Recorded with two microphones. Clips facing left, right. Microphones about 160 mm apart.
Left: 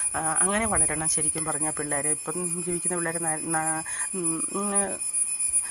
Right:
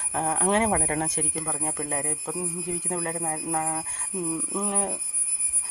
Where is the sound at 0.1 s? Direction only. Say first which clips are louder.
Right 4 dB; 30° right (ahead or behind).